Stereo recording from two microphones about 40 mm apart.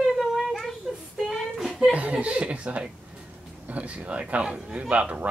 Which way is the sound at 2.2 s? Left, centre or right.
Right.